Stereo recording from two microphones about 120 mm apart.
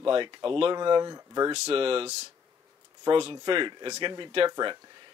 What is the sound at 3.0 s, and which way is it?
A man's voice, 45° right (ahead or behind).